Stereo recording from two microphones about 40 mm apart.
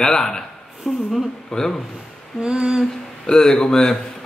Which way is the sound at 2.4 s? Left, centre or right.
Right.